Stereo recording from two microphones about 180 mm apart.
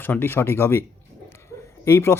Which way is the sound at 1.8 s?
15° left (ahead or behind).